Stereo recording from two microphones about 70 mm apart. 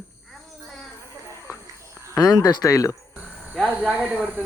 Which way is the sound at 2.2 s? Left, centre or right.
Left.